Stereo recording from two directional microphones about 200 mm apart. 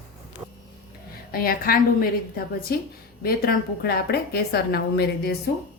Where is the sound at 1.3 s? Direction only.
50° left (ahead or behind).